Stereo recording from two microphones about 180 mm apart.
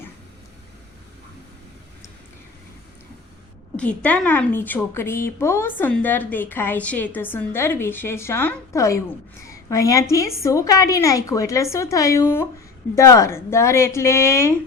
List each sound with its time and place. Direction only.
3.8 s a woman's voice: 5° left (ahead or behind)